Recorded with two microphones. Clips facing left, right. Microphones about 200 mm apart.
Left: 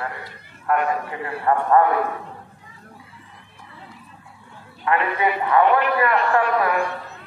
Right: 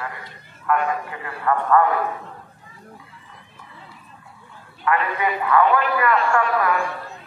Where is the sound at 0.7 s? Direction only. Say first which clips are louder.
Left 1 dB; 35° left (ahead or behind).